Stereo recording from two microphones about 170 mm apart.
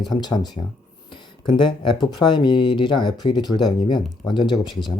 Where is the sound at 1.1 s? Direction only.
25° left (ahead or behind).